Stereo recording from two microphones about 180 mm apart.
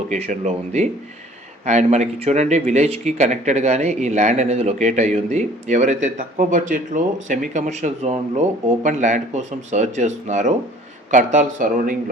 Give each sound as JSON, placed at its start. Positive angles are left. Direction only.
{"t": 0.1, "sound": "speech", "side_deg": -40}